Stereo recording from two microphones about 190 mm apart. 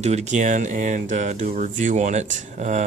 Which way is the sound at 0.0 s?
35° right (ahead or behind).